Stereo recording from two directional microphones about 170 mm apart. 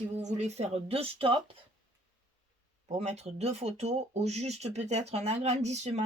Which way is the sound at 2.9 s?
40° right (ahead or behind).